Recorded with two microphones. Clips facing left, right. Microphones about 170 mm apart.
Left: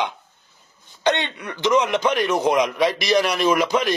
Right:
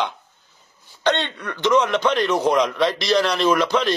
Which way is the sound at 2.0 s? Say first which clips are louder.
Right 1 dB; 5° left (ahead or behind).